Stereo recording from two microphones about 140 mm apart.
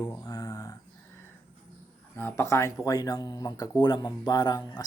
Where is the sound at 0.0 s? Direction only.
25° left (ahead or behind).